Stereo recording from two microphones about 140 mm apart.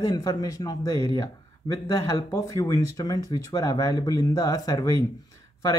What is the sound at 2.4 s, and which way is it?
Speech, 25° left (ahead or behind).